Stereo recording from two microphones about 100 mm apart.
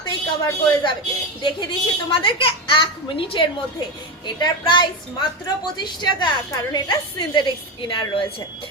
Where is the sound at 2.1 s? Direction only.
60° left (ahead or behind).